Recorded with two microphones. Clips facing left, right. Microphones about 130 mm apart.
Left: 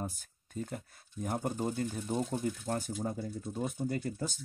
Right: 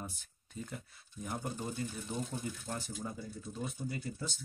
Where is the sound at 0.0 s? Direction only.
45° left (ahead or behind).